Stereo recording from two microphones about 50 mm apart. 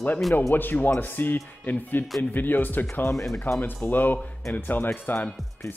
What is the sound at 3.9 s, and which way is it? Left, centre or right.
Speech, left.